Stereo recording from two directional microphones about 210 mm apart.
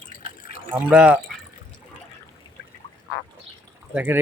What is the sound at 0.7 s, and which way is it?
Speech, 5° right (ahead or behind).